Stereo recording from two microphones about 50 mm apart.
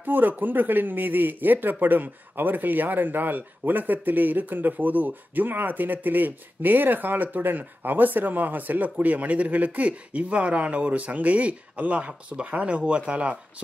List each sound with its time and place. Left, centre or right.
0.0 s speech: right